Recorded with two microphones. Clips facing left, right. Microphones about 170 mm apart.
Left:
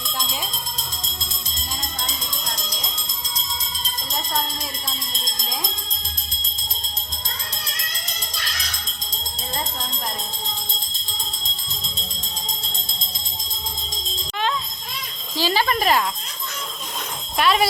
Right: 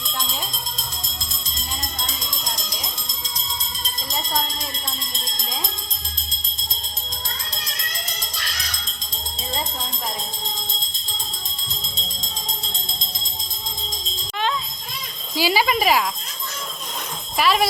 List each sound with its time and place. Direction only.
15.4 s speech: 10° right (ahead or behind)
17.3 s speech: centre (ahead or behind)